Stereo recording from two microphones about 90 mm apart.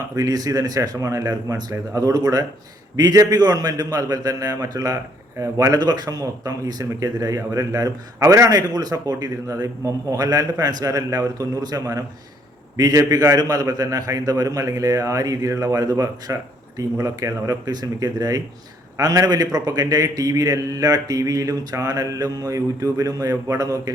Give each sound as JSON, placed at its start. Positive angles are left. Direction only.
{"t": 0.2, "sound": "a man's voice", "side_deg": -45}